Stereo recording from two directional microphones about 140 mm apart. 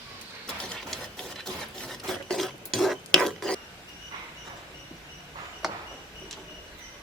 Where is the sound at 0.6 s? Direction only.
5° left (ahead or behind).